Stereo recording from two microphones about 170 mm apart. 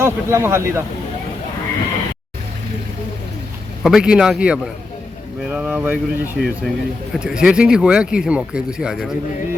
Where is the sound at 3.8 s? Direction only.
5° right (ahead or behind).